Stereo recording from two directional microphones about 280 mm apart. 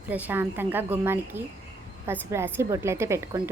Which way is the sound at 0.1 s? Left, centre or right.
Centre.